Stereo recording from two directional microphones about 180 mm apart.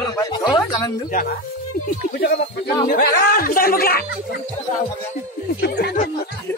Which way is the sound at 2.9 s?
50° left (ahead or behind).